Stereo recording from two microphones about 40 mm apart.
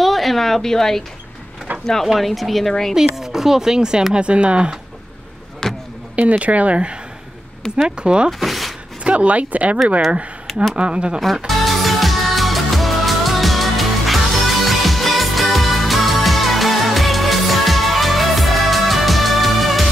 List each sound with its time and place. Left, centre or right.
0.0 s a sound: centre
2.1 s speech: centre; by 4.7 s right
5.6 s a sound: centre
6.1 s speech: right
7.6 s speech: left
8.0 s speech: right
8.3 s speech: centre
9.0 s speech: right
10.4 s a sound: centre
10.8 s speech: right
11.1 s music: centre